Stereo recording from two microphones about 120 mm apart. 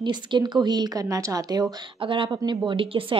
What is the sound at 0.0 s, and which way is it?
A woman's voice, 40° right (ahead or behind).